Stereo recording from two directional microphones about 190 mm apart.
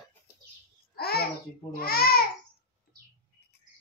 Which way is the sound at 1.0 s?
55° left (ahead or behind).